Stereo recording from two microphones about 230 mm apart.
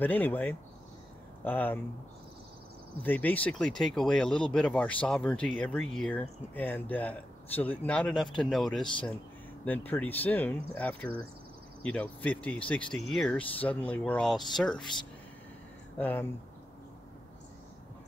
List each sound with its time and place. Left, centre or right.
0.0 s speech: centre
3.0 s speech: centre
14.8 s speech: centre
16.0 s speech: centre